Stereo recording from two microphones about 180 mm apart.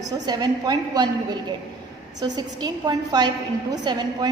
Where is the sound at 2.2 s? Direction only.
20° right (ahead or behind).